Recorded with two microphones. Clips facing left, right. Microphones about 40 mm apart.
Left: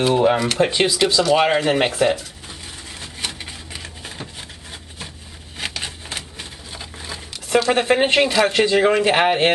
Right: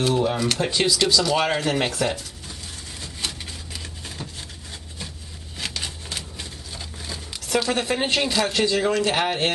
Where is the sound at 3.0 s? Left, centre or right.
Left.